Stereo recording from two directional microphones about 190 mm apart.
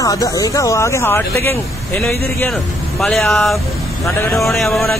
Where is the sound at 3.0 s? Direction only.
Centre (ahead or behind).